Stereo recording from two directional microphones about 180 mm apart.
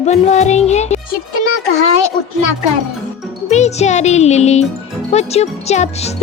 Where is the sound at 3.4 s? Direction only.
40° left (ahead or behind).